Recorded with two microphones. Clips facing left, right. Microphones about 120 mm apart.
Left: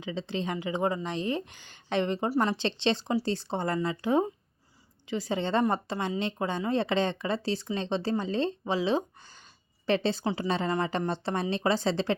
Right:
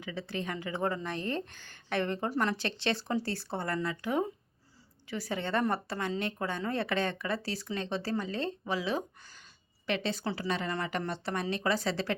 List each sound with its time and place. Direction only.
0.0 s speech: 20° left (ahead or behind)